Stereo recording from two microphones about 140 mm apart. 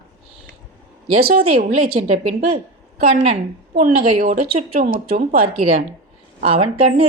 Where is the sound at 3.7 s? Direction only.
65° right (ahead or behind).